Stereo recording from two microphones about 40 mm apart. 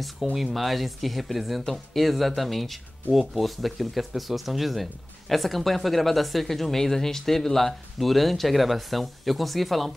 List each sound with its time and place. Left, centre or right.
0.0 s speech: centre